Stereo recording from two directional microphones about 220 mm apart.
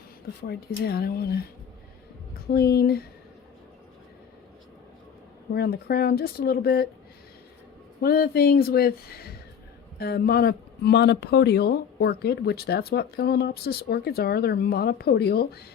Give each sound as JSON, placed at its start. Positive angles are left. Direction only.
{"t": 0.4, "sound": "speech", "side_deg": 45}
{"t": 2.5, "sound": "speech", "side_deg": 45}
{"t": 5.5, "sound": "speech", "side_deg": 45}
{"t": 8.0, "sound": "speech", "side_deg": 45}